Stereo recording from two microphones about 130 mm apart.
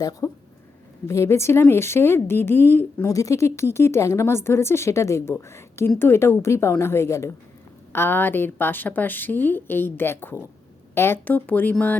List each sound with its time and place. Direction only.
0.0 s a woman's voice: 30° left (ahead or behind); by 11.9 s 10° left (ahead or behind)